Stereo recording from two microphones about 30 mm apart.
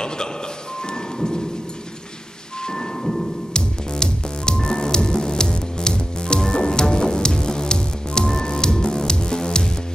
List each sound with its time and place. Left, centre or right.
2.7 s music: centre
3.5 s music: left